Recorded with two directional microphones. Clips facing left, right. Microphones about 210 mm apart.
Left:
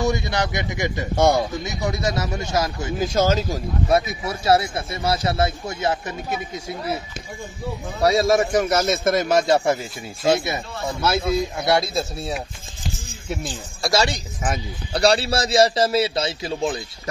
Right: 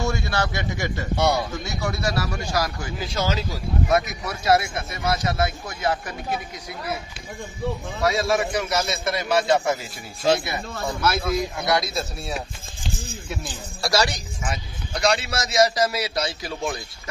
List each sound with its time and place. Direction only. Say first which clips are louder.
0.0 s speech: left 3 dB; 20° left (ahead or behind)
1.1 s a man's voice: left 4 dB; 50° left (ahead or behind)
1.6 s a man's voice: left 2 dB; 20° left (ahead or behind)
3.0 s a man's voice: left 7 dB; 45° left (ahead or behind)
3.9 s a man's voice: left 3 dB; 30° left (ahead or behind)
8.0 s a man's voice: left 5 dB; 40° left (ahead or behind)
11.0 s a man's voice: left 3 dB; 25° left (ahead or behind)
13.8 s a man's voice: left 2 dB; 25° left (ahead or behind)
14.5 s a man's voice: left 5 dB; 35° left (ahead or behind)